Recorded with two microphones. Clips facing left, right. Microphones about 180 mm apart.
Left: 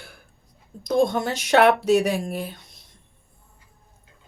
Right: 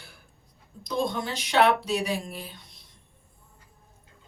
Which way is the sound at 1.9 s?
50° left (ahead or behind).